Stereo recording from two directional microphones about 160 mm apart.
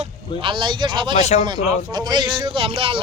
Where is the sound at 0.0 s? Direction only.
35° right (ahead or behind).